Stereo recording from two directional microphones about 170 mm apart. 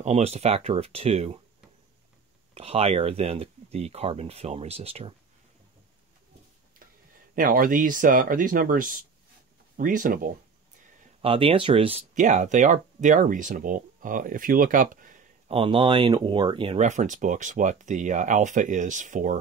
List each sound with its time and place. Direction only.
0.0 s speech: 40° right (ahead or behind)
2.5 s speech: 35° right (ahead or behind)
7.3 s speech: 55° right (ahead or behind)
11.2 s speech: 30° right (ahead or behind); by 15.2 s 50° right (ahead or behind)
15.4 s speech: 35° right (ahead or behind)
16.8 s speech: 45° right (ahead or behind)